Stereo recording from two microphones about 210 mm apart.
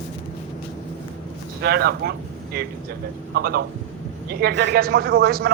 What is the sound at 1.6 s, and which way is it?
A woman's voice, 50° right (ahead or behind).